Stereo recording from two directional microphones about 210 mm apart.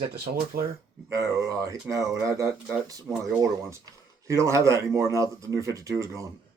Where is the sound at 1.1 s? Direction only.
15° right (ahead or behind).